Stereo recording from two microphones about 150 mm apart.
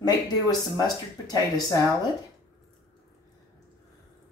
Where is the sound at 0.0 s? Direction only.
25° left (ahead or behind).